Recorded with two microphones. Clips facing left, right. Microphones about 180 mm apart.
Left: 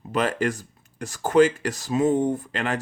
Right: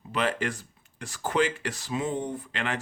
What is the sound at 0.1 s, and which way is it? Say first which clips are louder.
Speech: left 5 dB; 40° left (ahead or behind).